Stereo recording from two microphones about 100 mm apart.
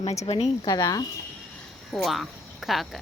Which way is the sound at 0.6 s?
35° left (ahead or behind).